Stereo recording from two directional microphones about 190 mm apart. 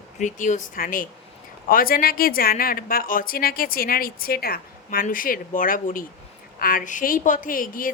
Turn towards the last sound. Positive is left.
turn(degrees=45)  # may be behind; listen again after turning